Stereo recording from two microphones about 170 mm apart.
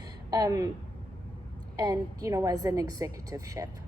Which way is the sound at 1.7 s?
20° right (ahead or behind).